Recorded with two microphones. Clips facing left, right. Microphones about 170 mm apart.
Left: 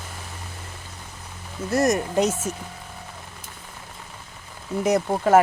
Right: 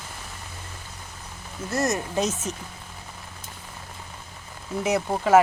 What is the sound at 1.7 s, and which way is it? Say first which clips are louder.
Speech: left 5 dB; 15° left (ahead or behind).